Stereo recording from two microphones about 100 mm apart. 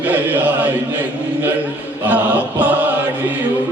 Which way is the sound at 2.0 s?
15° right (ahead or behind).